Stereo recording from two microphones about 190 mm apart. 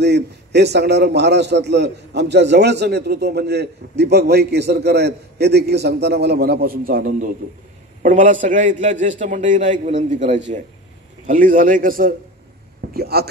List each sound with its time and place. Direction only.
0.0 s a man's voice: 65° right (ahead or behind)